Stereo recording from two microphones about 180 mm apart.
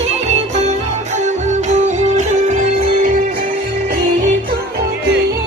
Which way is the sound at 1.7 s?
40° right (ahead or behind).